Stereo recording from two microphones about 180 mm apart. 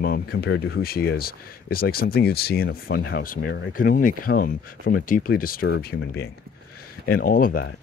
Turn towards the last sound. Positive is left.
turn(degrees=50)  # may be behind; listen again after turning